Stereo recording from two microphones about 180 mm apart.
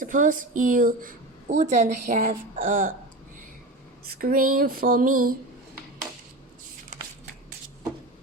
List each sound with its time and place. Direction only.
0.0 s speech: 50° right (ahead or behind)
4.0 s speech: 55° right (ahead or behind)